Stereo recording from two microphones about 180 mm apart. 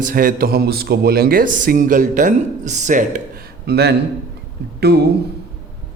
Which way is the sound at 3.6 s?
65° right (ahead or behind).